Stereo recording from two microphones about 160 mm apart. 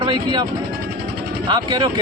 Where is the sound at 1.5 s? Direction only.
25° right (ahead or behind).